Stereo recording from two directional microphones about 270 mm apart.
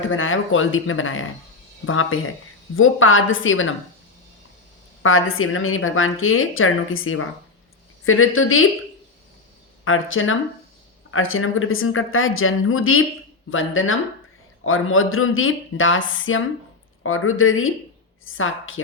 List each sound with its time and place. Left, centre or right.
0.1 s a woman's voice: left
5.0 s a woman's voice: left
9.8 s a woman's voice: left